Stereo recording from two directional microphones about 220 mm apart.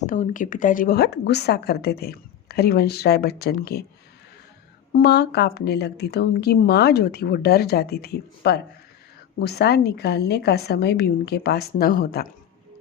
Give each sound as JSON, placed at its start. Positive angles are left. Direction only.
{"t": 0.0, "sound": "a woman's voice", "side_deg": 35}
{"t": 4.9, "sound": "a woman's voice", "side_deg": 50}